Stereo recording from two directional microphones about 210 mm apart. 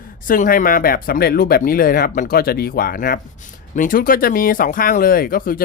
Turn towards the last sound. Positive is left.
turn(degrees=45)  # may be behind; listen again after turning